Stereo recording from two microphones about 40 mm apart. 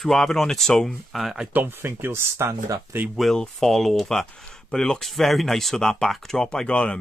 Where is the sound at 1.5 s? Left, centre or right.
Right.